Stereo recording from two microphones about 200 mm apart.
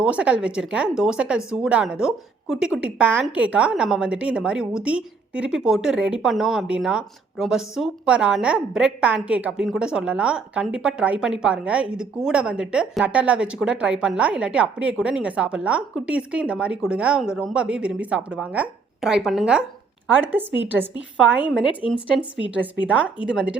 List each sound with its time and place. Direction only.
0.0 s a woman's voice: 5° right (ahead or behind)
21.8 s speech: 25° left (ahead or behind)
22.1 s a woman's voice: 5° right (ahead or behind)